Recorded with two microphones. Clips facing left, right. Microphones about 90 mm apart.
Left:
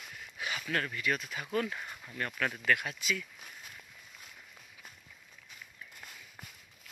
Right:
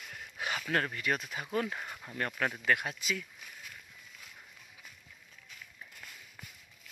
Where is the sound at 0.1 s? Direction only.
45° right (ahead or behind).